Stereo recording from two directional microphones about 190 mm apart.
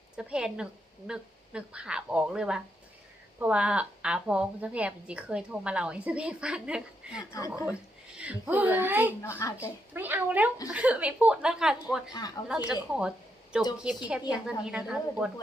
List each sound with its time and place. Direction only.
0.2 s a woman's voice: 5° right (ahead or behind)
7.3 s a woman's voice: 15° left (ahead or behind)
8.2 s a woman's voice: 10° right (ahead or behind)
12.9 s a sound: 5° right (ahead or behind)
13.8 s a woman's voice: 5° right (ahead or behind)